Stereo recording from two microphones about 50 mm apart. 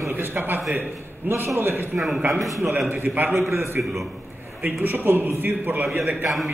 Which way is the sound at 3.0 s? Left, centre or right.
Right.